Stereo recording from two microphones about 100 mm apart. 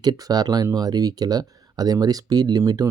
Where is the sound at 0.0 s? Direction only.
45° right (ahead or behind).